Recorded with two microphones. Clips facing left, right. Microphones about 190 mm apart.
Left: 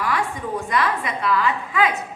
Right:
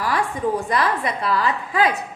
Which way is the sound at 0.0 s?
35° right (ahead or behind).